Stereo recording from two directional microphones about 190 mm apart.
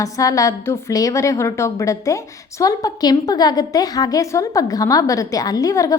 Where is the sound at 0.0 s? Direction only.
15° left (ahead or behind).